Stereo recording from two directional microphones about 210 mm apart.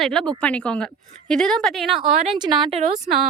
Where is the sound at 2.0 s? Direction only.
25° right (ahead or behind).